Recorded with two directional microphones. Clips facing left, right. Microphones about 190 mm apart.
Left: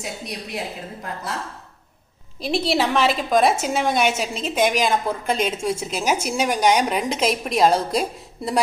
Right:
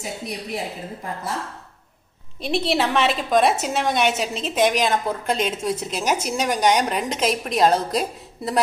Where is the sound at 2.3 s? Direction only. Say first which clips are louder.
Left 1 dB; centre (ahead or behind).